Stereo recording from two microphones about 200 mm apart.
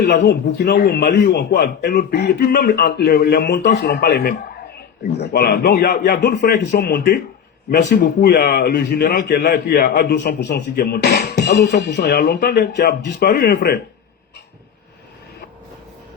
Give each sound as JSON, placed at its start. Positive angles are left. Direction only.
{"t": 0.0, "sound": "speech", "side_deg": 55}